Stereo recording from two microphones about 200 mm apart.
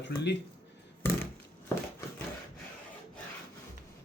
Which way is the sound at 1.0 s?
10° left (ahead or behind).